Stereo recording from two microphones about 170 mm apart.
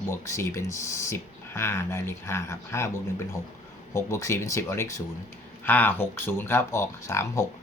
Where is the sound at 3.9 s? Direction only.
15° left (ahead or behind).